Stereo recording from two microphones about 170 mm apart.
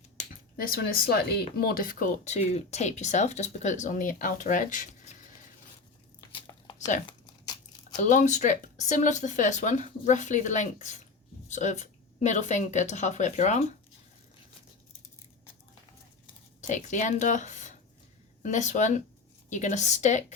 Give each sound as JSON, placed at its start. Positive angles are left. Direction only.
{"t": 0.2, "sound": "a sound", "side_deg": 60}
{"t": 1.5, "sound": "speech", "side_deg": 60}
{"t": 6.1, "sound": "a sound", "side_deg": 25}
{"t": 6.7, "sound": "crumpling", "side_deg": 45}
{"t": 8.0, "sound": "speech", "side_deg": 45}
{"t": 16.6, "sound": "speech", "side_deg": 45}